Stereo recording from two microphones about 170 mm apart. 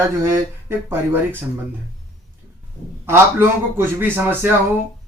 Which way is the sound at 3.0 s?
15° right (ahead or behind).